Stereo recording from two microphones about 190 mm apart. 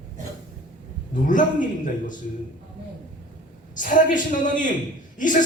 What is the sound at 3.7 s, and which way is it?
Speech, 45° left (ahead or behind).